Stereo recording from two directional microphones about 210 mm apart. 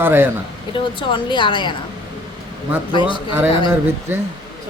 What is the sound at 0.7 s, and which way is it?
A woman's voice, 25° left (ahead or behind).